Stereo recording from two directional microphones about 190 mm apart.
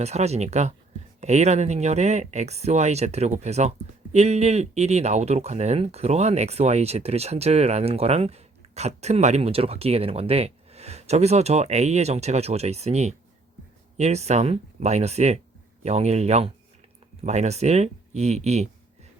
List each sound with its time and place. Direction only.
0.0 s speech: 35° right (ahead or behind)